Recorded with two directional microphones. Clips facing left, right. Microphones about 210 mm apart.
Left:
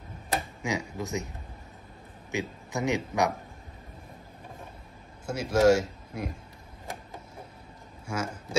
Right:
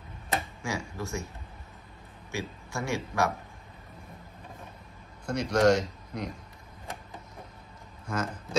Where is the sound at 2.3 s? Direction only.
15° left (ahead or behind).